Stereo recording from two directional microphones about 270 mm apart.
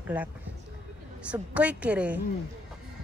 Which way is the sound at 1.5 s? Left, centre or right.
Centre.